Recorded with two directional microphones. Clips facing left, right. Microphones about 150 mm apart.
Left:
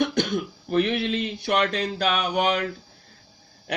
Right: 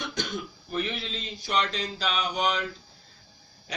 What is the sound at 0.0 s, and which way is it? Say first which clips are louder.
Throat clearing: left 11 dB; 60° left (ahead or behind).